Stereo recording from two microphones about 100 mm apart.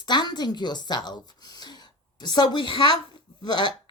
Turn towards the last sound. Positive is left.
turn(degrees=50)  # may be behind; listen again after turning